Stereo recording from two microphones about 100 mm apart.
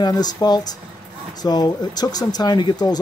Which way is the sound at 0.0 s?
40° left (ahead or behind).